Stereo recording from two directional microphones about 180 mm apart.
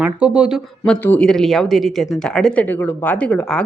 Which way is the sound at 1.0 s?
5° left (ahead or behind).